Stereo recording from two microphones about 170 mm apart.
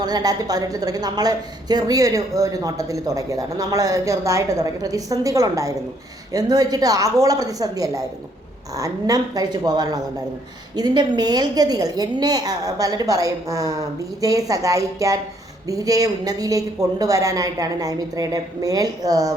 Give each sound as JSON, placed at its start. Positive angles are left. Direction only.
{"t": 0.0, "sound": "a woman's voice", "side_deg": -25}